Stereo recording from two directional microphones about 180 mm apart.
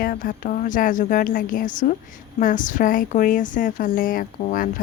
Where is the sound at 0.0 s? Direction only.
50° left (ahead or behind).